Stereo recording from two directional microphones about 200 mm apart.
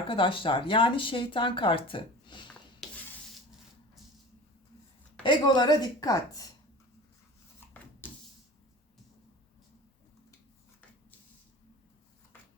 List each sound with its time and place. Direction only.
0.1 s speech: 25° left (ahead or behind)
5.2 s speech: 20° left (ahead or behind)
8.0 s a sound: 10° left (ahead or behind)